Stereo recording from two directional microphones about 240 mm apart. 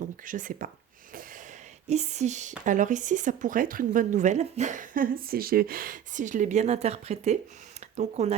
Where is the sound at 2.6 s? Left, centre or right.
Right.